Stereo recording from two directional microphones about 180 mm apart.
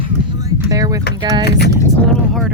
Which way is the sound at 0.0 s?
25° right (ahead or behind).